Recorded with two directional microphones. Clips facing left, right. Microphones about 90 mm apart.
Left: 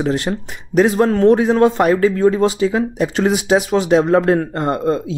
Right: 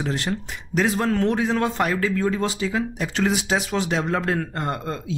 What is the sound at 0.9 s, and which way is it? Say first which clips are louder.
Speech: left 9 dB; 30° left (ahead or behind).